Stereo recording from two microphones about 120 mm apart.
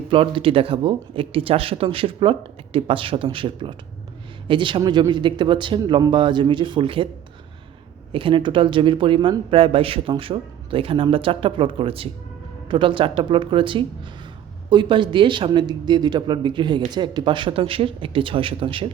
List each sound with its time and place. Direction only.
0.1 s speech: 50° right (ahead or behind)
8.1 s speech: 45° right (ahead or behind)